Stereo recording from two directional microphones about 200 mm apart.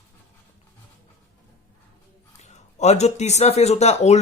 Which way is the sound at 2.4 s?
35° left (ahead or behind).